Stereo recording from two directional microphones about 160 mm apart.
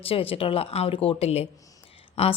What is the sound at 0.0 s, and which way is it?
A woman's voice, 35° left (ahead or behind).